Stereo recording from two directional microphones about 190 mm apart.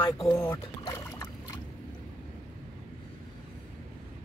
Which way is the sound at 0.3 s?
15° left (ahead or behind).